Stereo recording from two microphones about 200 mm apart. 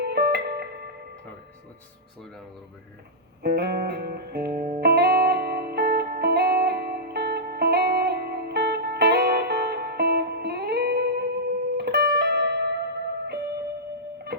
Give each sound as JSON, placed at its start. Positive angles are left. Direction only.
{"t": 0.0, "sound": "music", "side_deg": -55}
{"t": 3.4, "sound": "music", "side_deg": -50}